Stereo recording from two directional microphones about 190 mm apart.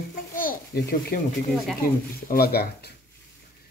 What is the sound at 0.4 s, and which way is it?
A child's voice, 50° left (ahead or behind).